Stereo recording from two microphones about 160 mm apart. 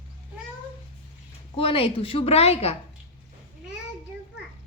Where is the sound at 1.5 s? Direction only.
35° left (ahead or behind).